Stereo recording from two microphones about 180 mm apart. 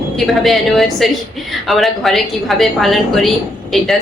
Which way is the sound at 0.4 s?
Centre (ahead or behind).